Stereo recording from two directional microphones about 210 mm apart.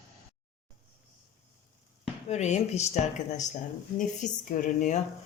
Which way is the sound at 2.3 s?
35° left (ahead or behind).